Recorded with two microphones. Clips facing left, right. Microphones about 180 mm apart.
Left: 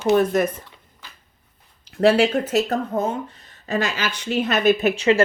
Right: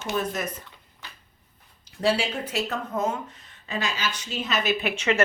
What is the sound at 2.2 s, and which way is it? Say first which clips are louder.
Speech: left 10 dB; 45° left (ahead or behind).